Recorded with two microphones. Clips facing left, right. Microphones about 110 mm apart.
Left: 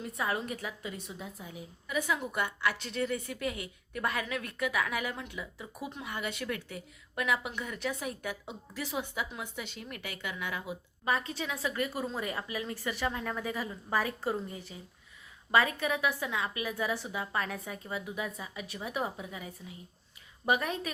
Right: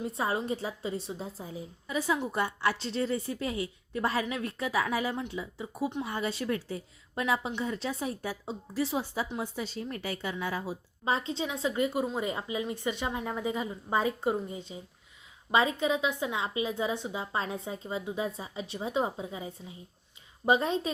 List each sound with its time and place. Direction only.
0.0 s a woman's voice: 30° right (ahead or behind)